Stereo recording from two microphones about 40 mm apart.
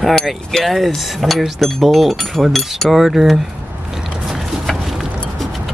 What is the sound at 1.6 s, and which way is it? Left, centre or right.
Speech, centre.